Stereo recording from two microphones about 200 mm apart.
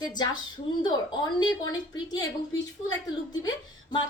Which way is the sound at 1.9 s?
20° left (ahead or behind).